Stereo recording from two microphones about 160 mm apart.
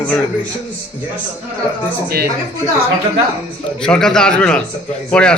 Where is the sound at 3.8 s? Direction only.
5° left (ahead or behind).